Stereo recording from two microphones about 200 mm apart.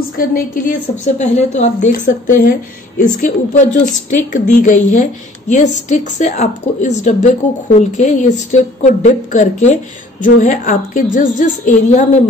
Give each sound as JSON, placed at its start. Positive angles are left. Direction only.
{"t": 0.3, "sound": "a woman's voice", "side_deg": 40}